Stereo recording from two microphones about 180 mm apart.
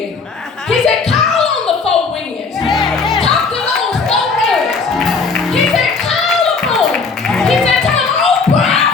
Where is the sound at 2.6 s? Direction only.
Centre (ahead or behind).